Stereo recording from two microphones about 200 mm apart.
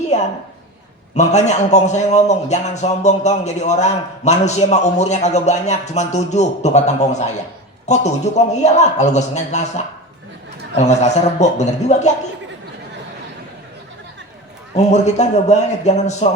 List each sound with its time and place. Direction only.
0.1 s a sound: 35° left (ahead or behind)
1.1 s a man's voice: 35° left (ahead or behind)
14.8 s a man's voice: 35° left (ahead or behind)